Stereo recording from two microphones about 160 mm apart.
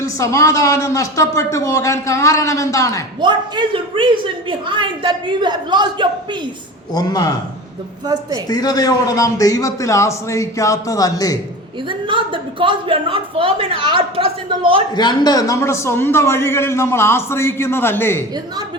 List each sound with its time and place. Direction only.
0.0 s speech: 20° left (ahead or behind)
3.2 s a woman's voice: 30° right (ahead or behind)
6.9 s speech: 25° left (ahead or behind)
8.0 s a woman's voice: 25° right (ahead or behind)
8.4 s speech: 25° left (ahead or behind)
11.9 s speech: 30° right (ahead or behind)
14.9 s a man's voice: 25° left (ahead or behind)